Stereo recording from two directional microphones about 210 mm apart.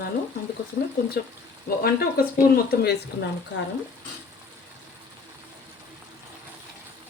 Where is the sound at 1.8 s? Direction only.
45° left (ahead or behind).